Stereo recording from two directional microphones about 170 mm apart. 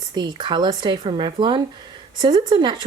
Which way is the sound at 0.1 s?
25° right (ahead or behind).